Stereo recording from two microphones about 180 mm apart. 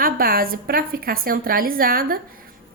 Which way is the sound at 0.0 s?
55° right (ahead or behind).